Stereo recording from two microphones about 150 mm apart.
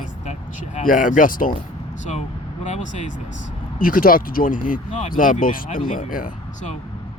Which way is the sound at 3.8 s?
70° left (ahead or behind).